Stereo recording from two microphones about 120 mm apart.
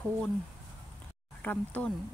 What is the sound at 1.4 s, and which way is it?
Speech, 15° left (ahead or behind).